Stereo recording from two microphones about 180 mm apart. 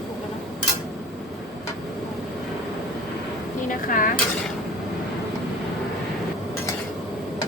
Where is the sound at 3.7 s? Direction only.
50° left (ahead or behind).